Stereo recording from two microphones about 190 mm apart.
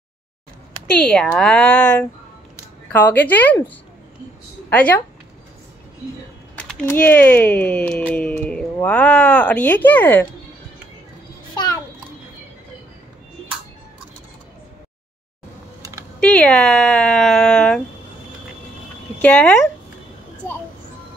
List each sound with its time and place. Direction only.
0.9 s speech: 5° left (ahead or behind)
6.5 s speech: 5° left (ahead or behind)
11.5 s a sound: 20° left (ahead or behind)
15.8 s typing: 15° right (ahead or behind)
16.2 s speech: 5° left (ahead or behind)
19.2 s speech: 10° left (ahead or behind)